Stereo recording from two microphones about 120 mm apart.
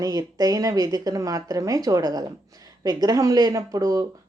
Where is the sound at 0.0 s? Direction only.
30° right (ahead or behind).